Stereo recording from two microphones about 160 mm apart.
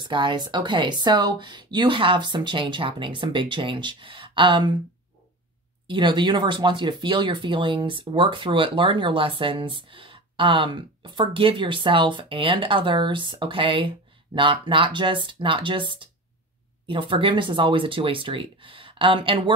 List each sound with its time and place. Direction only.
0.0 s speech: 30° right (ahead or behind)
5.9 s speech: 30° right (ahead or behind)